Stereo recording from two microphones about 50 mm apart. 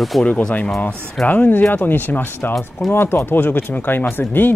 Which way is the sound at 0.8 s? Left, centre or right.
Left.